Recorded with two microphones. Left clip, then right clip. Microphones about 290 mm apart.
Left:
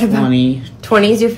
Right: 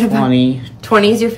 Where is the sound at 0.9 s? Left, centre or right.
Centre.